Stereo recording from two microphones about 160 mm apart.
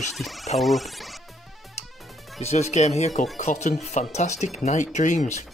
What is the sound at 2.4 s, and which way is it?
Speech, 45° left (ahead or behind).